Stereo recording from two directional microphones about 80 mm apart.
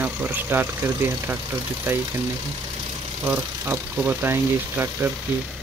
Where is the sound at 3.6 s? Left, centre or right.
Right.